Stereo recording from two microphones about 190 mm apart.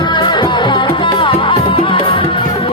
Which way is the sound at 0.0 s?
25° left (ahead or behind).